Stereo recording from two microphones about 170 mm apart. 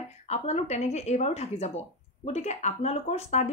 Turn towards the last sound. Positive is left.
turn(degrees=40)  # may be behind; listen again after turning